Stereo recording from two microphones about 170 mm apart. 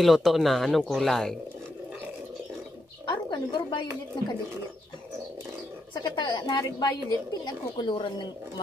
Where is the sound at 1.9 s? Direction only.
10° right (ahead or behind).